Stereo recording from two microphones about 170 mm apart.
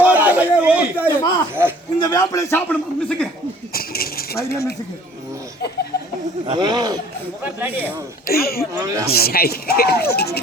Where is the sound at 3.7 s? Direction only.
60° left (ahead or behind).